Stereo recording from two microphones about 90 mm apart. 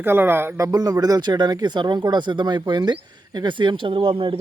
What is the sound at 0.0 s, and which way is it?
Speech, 25° right (ahead or behind).